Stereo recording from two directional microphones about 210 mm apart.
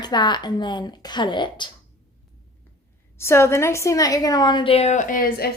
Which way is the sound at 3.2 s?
10° left (ahead or behind).